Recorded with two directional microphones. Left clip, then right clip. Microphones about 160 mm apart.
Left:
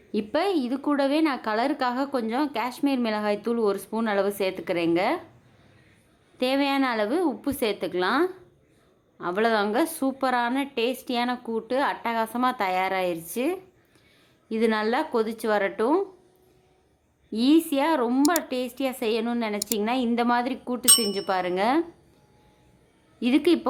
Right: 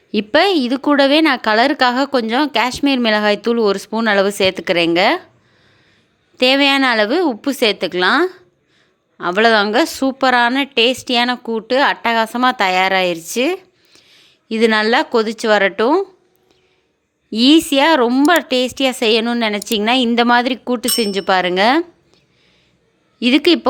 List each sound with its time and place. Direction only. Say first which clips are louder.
0.1 s a woman's voice: right 11 dB; 30° right (ahead or behind)
6.3 s a woman's voice: right 12 dB; 30° right (ahead or behind)
17.3 s a woman's voice: right 10 dB; 30° right (ahead or behind)
23.2 s a woman's voice: right 9 dB; 25° right (ahead or behind)